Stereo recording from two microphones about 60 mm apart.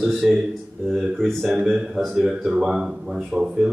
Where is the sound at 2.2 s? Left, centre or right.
Centre.